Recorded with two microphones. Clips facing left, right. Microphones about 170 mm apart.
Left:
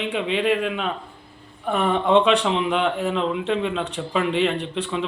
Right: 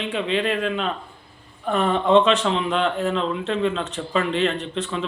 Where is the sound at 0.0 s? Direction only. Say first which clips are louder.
Left 1 dB; 15° left (ahead or behind).